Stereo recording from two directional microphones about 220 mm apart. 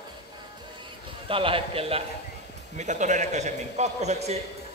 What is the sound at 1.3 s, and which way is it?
A man's voice, 25° right (ahead or behind).